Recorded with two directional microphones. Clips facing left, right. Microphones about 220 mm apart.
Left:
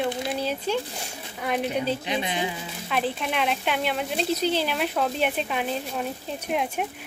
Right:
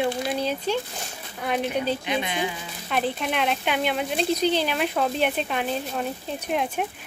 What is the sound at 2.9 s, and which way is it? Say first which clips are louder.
Speech: right 1 dB; centre (ahead or behind).